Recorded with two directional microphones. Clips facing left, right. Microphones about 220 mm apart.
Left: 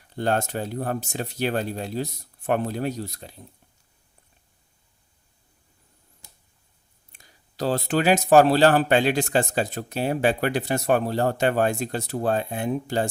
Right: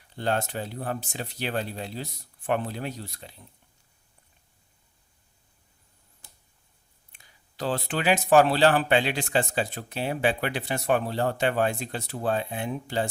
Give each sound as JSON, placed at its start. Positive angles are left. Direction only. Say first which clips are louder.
{"t": 0.2, "sound": "speech", "louder": "left 3 dB", "side_deg": 45}
{"t": 7.1, "sound": "speech", "louder": "left 4 dB", "side_deg": 40}